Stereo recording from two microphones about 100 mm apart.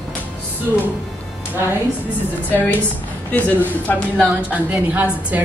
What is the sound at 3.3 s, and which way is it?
Speech, 15° left (ahead or behind).